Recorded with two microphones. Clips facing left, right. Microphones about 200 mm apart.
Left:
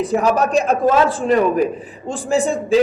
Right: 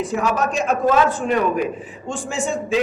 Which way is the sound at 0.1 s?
35° left (ahead or behind).